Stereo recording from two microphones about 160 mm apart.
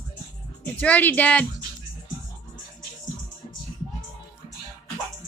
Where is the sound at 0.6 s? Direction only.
10° left (ahead or behind).